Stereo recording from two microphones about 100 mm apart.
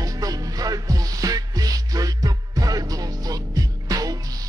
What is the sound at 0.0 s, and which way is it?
Music, 35° right (ahead or behind).